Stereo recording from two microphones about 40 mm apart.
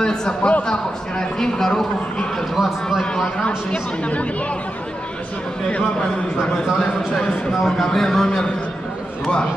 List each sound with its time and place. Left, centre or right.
0.0 s a sound: centre
0.7 s a man's voice: centre
2.5 s a man's voice: centre
3.0 s a man's voice: centre
5.7 s a man's voice: left
7.5 s a man's voice: centre